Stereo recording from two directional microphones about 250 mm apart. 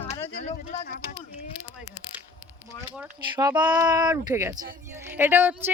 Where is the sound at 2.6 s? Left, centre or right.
Centre.